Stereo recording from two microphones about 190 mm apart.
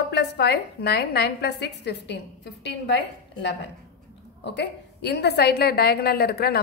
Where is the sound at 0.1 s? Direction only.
60° left (ahead or behind).